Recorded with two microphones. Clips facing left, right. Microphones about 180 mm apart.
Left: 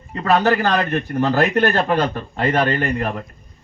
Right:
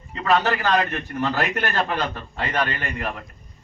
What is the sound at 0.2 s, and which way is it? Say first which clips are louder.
A man's voice: left 4 dB; 40° left (ahead or behind).